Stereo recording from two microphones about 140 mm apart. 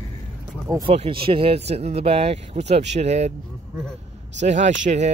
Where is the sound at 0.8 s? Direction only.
45° right (ahead or behind).